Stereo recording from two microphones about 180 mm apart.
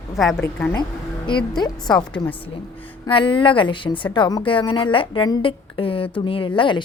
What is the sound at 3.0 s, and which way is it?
A woman's voice, 30° left (ahead or behind).